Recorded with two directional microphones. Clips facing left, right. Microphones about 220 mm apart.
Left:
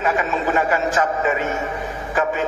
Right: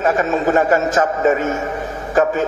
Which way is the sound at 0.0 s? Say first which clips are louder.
Right 5 dB; 45° right (ahead or behind).